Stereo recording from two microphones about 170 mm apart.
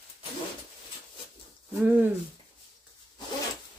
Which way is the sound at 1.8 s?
10° right (ahead or behind).